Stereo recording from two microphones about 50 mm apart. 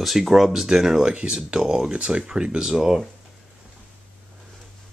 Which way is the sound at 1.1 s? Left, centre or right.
Right.